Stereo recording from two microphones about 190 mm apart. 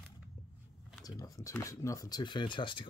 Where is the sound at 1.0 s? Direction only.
15° left (ahead or behind).